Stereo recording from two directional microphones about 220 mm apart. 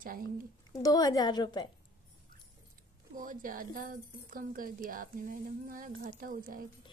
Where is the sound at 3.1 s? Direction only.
40° right (ahead or behind).